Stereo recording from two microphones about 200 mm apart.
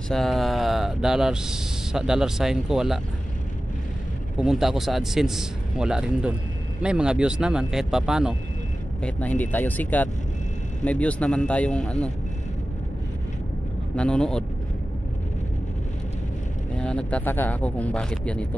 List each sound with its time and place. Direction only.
0.1 s speech: centre (ahead or behind)
4.4 s speech: centre (ahead or behind)
9.0 s speech: 5° left (ahead or behind)
13.9 s speech: 5° left (ahead or behind)
16.7 s speech: 5° left (ahead or behind)